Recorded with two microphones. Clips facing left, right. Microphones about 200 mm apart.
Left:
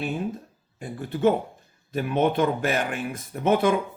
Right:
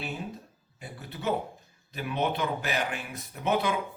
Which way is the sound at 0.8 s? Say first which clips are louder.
Left 15 dB; 50° left (ahead or behind).